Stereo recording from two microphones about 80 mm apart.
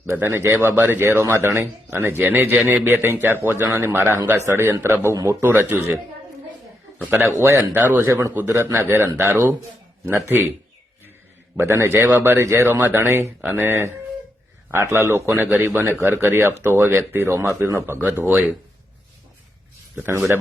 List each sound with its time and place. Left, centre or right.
0.1 s a man's voice: right
5.5 s a man's voice: right
7.0 s a man's voice: right
7.3 s speech: right
7.7 s a man's voice: right
11.5 s a man's voice: right
20.1 s a man's voice: right